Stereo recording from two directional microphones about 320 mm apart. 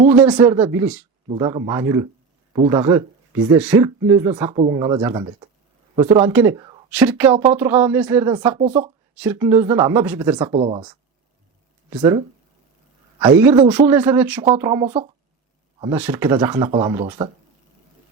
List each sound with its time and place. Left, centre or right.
0.2 s a woman's voice: centre
8.5 s speech: centre
9.1 s a woman's voice: centre
13.4 s a woman's voice: centre